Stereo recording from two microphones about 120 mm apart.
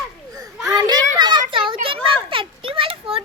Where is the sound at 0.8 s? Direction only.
35° right (ahead or behind); by 3.2 s 50° right (ahead or behind).